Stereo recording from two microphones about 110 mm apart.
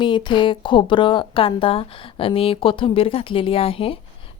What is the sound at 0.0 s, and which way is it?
Speech, 45° left (ahead or behind).